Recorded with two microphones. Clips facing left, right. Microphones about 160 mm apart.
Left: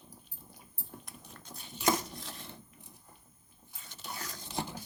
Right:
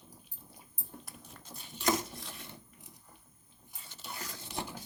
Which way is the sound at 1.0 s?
5° right (ahead or behind).